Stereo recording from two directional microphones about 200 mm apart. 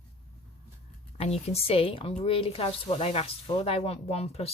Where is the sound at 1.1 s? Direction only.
30° left (ahead or behind).